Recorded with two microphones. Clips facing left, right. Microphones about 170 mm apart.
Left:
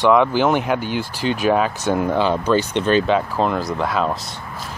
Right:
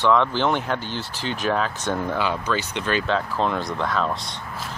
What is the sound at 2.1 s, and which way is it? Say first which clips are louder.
Speech: left 7 dB; 30° left (ahead or behind).